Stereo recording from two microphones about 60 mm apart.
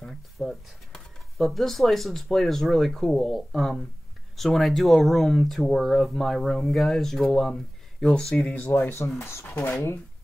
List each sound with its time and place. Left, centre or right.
0.0 s speech: centre
8.5 s speech: left
9.2 s speech: left